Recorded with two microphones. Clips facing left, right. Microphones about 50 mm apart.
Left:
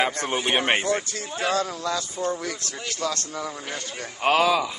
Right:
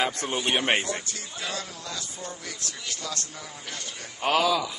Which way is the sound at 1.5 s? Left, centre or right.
Left.